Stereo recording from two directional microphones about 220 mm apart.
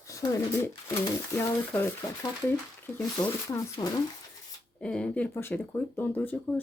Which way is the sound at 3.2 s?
15° left (ahead or behind).